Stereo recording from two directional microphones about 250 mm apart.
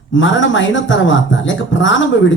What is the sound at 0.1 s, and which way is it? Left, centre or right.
Speech, left.